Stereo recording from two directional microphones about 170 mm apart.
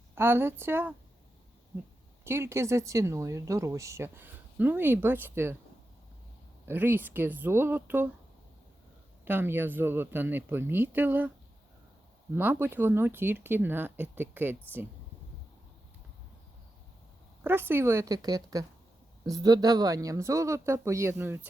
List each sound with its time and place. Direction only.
0.2 s speech: 15° right (ahead or behind)
2.2 s speech: 15° right (ahead or behind)
6.7 s speech: 10° right (ahead or behind)
9.2 s speech: 10° right (ahead or behind)
12.3 s speech: 10° right (ahead or behind)
17.4 s speech: 10° right (ahead or behind)